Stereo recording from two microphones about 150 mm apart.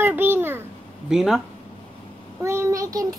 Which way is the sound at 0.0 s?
15° right (ahead or behind).